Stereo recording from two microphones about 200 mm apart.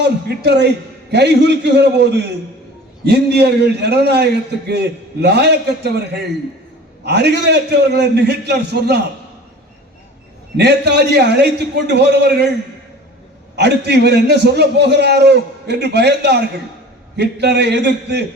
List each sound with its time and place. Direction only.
0.3 s a man's voice: 55° right (ahead or behind)
10.6 s a man's voice: 55° right (ahead or behind)
13.6 s a man's voice: 55° right (ahead or behind)